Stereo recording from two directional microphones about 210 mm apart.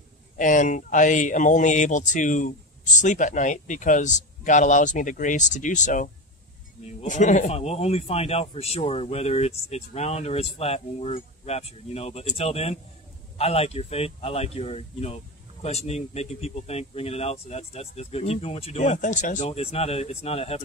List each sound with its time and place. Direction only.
0.4 s speech: 35° left (ahead or behind)